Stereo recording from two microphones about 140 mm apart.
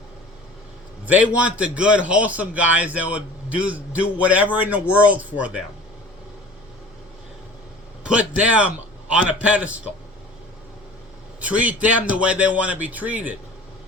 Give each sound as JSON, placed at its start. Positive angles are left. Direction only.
{"t": 1.0, "sound": "a man's voice", "side_deg": -10}
{"t": 8.0, "sound": "a man's voice", "side_deg": -10}
{"t": 11.3, "sound": "a man's voice", "side_deg": -10}